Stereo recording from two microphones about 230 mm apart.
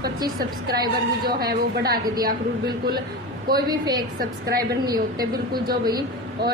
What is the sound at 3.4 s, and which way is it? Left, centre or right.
Speech, centre.